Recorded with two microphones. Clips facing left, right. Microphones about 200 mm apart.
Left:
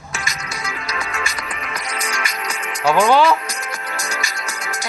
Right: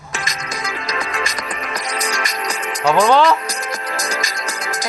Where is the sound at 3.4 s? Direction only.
35° right (ahead or behind).